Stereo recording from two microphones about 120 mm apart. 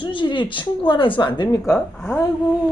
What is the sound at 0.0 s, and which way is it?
Speech, 40° left (ahead or behind).